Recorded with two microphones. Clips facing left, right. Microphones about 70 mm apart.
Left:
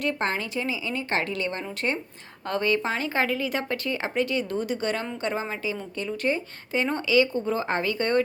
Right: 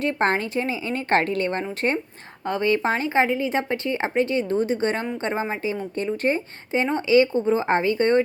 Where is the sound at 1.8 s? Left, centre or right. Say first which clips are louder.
Right 3 dB; right.